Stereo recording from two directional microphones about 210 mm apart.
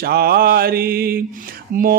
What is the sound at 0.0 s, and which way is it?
Speech, 45° right (ahead or behind).